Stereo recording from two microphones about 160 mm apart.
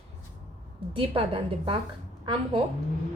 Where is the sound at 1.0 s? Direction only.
35° right (ahead or behind).